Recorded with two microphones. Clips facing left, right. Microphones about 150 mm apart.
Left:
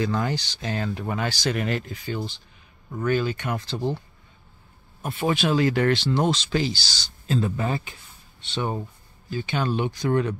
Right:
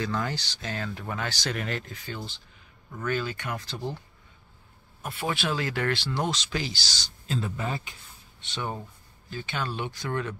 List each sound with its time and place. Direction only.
0.0 s speech: 15° left (ahead or behind)
5.0 s speech: 20° left (ahead or behind); by 7.8 s 45° left (ahead or behind)
8.5 s speech: 25° left (ahead or behind)